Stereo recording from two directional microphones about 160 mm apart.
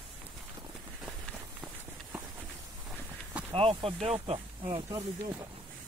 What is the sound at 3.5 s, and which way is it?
Speech, 35° right (ahead or behind).